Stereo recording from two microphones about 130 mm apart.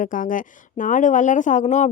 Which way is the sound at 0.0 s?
90° left.